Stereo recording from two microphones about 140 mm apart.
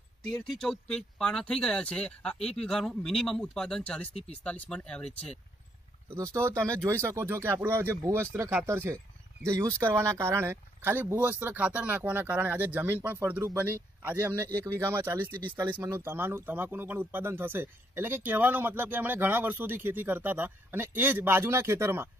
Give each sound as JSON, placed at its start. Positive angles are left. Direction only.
{"t": 0.5, "sound": "speech", "side_deg": 5}
{"t": 6.0, "sound": "speech", "side_deg": -20}